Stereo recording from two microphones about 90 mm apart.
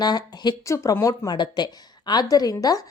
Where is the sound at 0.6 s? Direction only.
35° left (ahead or behind).